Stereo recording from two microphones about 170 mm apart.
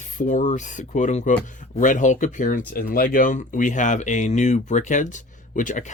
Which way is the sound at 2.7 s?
60° left (ahead or behind).